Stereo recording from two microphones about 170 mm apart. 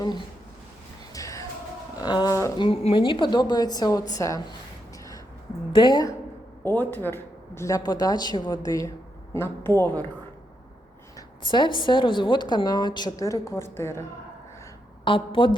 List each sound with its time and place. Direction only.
1.1 s music: 20° left (ahead or behind)
2.0 s speech: 25° left (ahead or behind)
2.6 s a woman's voice: 30° left (ahead or behind)
5.7 s a woman's voice: 25° left (ahead or behind)
6.7 s a woman's voice: 10° left (ahead or behind)
11.5 s a woman's voice: 30° left (ahead or behind)
15.0 s a woman's voice: 30° left (ahead or behind)